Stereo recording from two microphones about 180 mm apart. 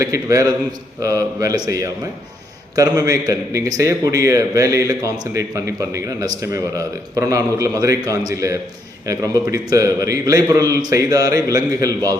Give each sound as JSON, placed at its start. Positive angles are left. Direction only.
{"t": 0.0, "sound": "a man's voice", "side_deg": -20}